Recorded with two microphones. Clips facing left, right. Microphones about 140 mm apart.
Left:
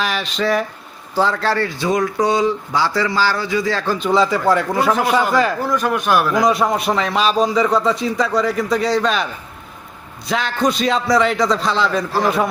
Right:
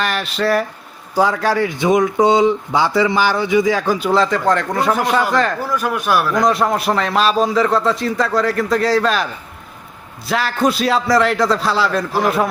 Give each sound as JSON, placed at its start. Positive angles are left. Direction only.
{"t": 0.0, "sound": "a man's voice", "side_deg": 0}
{"t": 5.6, "sound": "a man's voice", "side_deg": -5}